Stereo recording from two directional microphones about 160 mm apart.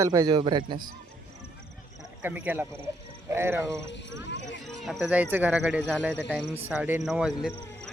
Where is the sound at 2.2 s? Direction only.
10° right (ahead or behind).